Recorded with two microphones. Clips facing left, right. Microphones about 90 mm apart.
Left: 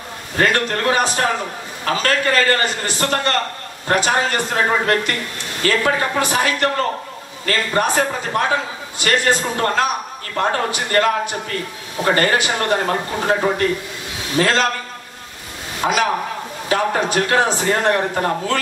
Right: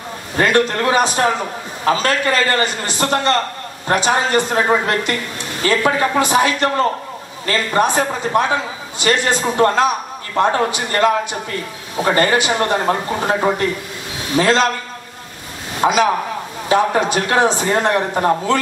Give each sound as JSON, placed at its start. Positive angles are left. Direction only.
{"t": 0.4, "sound": "a man's voice", "side_deg": -20}
{"t": 12.2, "sound": "a man's voice", "side_deg": -20}
{"t": 15.8, "sound": "a man's voice", "side_deg": -20}